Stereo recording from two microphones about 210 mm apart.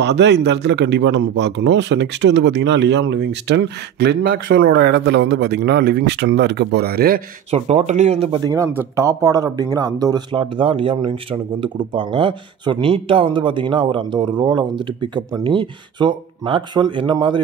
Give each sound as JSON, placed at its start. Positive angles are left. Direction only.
{"t": 0.0, "sound": "speech", "side_deg": -55}
{"t": 7.5, "sound": "speech", "side_deg": -30}
{"t": 8.5, "sound": "speech", "side_deg": -15}